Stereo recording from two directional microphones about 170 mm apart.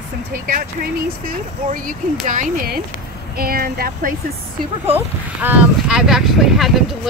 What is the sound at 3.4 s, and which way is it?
Speech, 60° right (ahead or behind).